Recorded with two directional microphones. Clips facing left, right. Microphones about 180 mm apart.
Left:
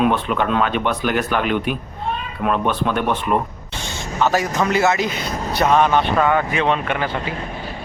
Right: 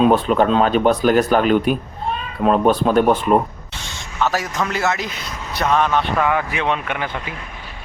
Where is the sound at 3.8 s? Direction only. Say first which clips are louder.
Left 2 dB; centre (ahead or behind).